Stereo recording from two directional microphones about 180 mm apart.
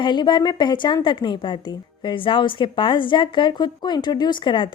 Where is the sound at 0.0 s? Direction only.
25° left (ahead or behind).